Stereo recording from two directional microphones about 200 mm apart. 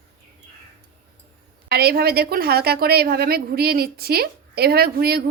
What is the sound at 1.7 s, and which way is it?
A woman's voice, 50° right (ahead or behind).